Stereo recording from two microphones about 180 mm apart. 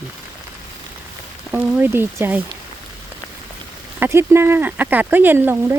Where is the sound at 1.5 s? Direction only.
10° right (ahead or behind).